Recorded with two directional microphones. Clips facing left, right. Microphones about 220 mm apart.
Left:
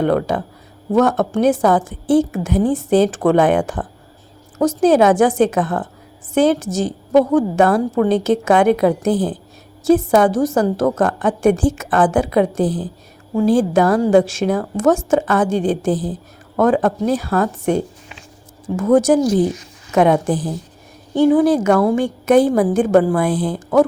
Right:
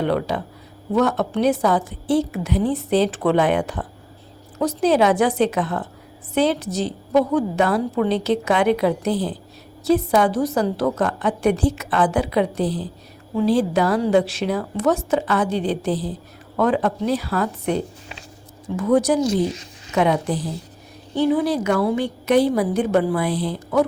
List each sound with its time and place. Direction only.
0.0 s a woman's voice: 45° left (ahead or behind)